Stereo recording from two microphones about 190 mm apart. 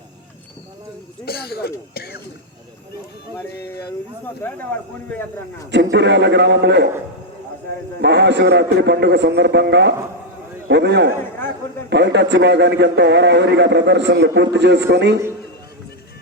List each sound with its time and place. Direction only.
1.2 s a sound: 55° left (ahead or behind)
3.3 s speech: 15° left (ahead or behind)
5.7 s a man's voice: 65° right (ahead or behind)
8.0 s a man's voice: 65° right (ahead or behind)